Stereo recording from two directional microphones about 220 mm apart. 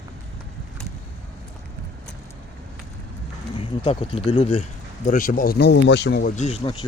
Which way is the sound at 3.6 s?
25° left (ahead or behind).